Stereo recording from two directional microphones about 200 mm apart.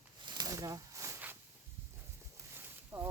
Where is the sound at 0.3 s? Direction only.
20° right (ahead or behind).